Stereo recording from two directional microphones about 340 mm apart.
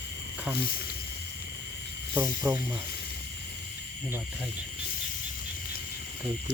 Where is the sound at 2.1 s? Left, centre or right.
Centre.